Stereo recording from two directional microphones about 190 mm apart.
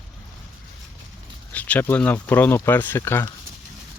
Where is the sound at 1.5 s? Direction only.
10° left (ahead or behind).